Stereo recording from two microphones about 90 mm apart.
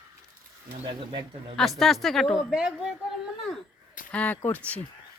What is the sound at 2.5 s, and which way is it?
Speech, 10° right (ahead or behind).